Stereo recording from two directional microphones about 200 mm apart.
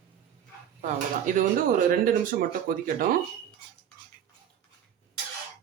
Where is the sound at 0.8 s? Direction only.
40° right (ahead or behind).